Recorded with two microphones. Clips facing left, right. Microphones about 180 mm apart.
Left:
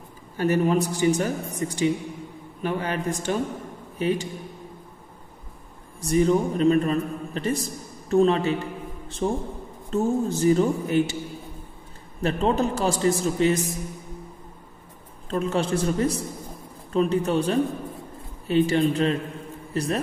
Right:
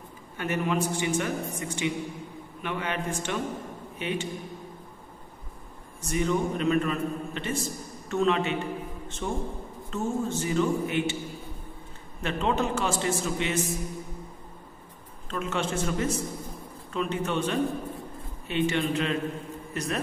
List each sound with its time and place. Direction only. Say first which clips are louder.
0.4 s a man's voice: left 6 dB; 35° left (ahead or behind)
5.9 s a man's voice: left 6 dB; 35° left (ahead or behind)
12.2 s a man's voice: left 5 dB; 35° left (ahead or behind)
15.2 s a man's voice: left 5 dB; 35° left (ahead or behind)